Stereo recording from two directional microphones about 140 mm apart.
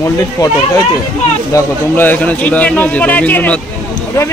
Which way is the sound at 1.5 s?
15° left (ahead or behind).